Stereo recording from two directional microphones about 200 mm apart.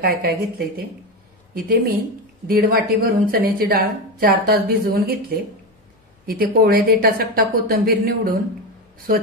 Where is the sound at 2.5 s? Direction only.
50° right (ahead or behind).